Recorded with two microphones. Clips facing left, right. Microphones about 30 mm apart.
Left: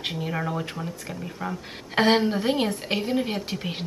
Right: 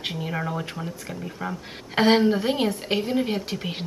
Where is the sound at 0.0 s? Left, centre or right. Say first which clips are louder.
Even; centre.